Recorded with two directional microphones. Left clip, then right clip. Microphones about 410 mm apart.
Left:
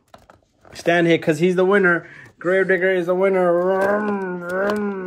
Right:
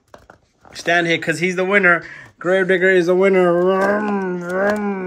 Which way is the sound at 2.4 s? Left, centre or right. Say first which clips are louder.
Right 2 dB; centre.